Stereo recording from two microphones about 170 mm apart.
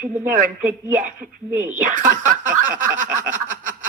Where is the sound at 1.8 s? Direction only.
50° right (ahead or behind).